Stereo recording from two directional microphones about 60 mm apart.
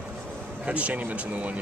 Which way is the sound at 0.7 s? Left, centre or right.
Right.